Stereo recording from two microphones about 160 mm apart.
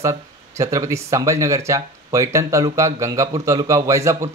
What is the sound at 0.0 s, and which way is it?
Speech, 20° right (ahead or behind).